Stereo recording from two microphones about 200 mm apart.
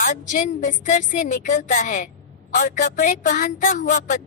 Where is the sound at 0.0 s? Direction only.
40° left (ahead or behind).